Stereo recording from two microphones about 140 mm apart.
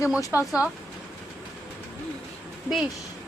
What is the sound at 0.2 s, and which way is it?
Speech, 20° left (ahead or behind).